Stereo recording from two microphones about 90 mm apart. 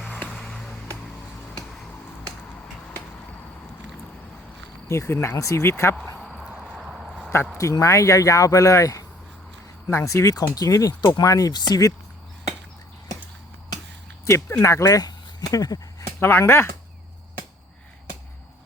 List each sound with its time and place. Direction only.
0.3 s a sound: centre (ahead or behind)
4.9 s speech: 30° left (ahead or behind)
6.1 s a sound: 5° right (ahead or behind)
7.6 s speech: 35° left (ahead or behind)
14.6 s speech: 35° left (ahead or behind)
16.0 s speech: 25° left (ahead or behind)